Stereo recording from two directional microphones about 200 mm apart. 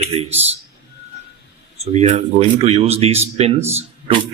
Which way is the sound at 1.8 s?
35° right (ahead or behind).